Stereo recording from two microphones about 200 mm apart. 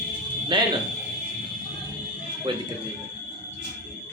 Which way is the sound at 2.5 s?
25° right (ahead or behind).